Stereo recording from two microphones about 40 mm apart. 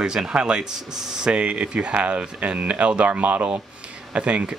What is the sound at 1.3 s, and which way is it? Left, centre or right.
Speech, right.